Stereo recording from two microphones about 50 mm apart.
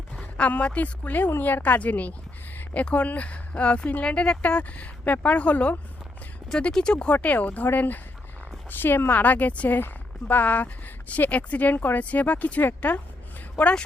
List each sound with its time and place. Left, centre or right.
0.2 s speech: left
1.3 s speech: left
6.6 s speech: centre
7.1 s speech: left
9.7 s speech: left